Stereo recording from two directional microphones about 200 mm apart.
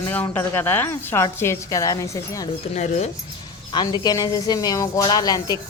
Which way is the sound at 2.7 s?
35° left (ahead or behind).